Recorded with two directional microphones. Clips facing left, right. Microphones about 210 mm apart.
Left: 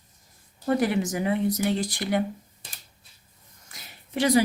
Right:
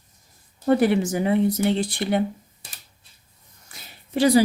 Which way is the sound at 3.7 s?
30° right (ahead or behind).